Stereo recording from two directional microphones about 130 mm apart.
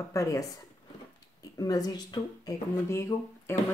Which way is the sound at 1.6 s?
30° left (ahead or behind).